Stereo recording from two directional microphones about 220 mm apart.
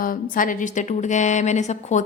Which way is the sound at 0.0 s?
40° left (ahead or behind).